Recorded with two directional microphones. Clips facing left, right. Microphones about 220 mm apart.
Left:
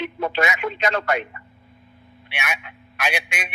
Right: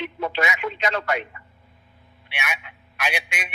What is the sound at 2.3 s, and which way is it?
A man's voice, 50° left (ahead or behind).